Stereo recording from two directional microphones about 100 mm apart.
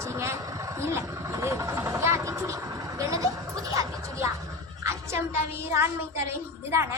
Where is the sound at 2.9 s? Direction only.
35° right (ahead or behind).